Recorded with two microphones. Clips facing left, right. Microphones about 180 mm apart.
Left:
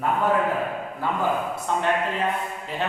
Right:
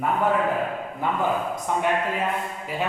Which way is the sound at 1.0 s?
20° right (ahead or behind).